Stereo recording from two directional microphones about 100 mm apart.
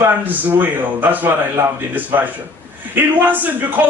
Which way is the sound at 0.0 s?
20° right (ahead or behind).